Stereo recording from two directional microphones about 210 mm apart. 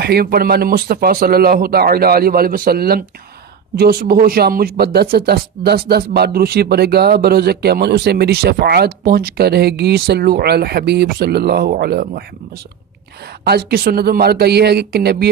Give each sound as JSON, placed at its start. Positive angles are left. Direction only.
{"t": 0.0, "sound": "speech", "side_deg": -45}
{"t": 13.4, "sound": "speech", "side_deg": -50}